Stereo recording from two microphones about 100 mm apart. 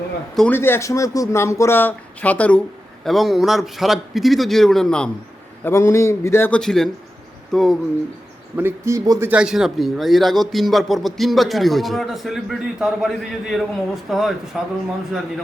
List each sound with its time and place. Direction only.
0.5 s speech: 20° left (ahead or behind)
3.0 s a man's voice: centre (ahead or behind)
5.6 s speech: 25° left (ahead or behind)
6.5 s a man's voice: 5° left (ahead or behind)
8.5 s speech: 25° right (ahead or behind)
9.3 s a man's voice: 10° right (ahead or behind)